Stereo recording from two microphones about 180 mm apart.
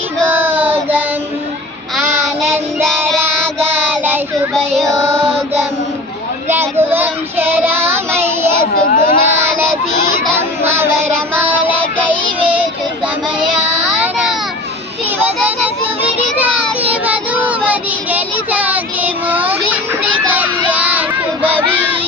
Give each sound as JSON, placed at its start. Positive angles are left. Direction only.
{"t": 0.5, "sound": "child singing", "side_deg": -10}
{"t": 4.5, "sound": "child singing", "side_deg": 5}
{"t": 6.5, "sound": "child singing", "side_deg": -10}
{"t": 8.9, "sound": "a sound", "side_deg": 45}
{"t": 13.8, "sound": "child singing", "side_deg": -5}
{"t": 17.4, "sound": "child singing", "side_deg": -10}
{"t": 19.3, "sound": "child singing", "side_deg": -10}
{"t": 20.3, "sound": "baby cry", "side_deg": -10}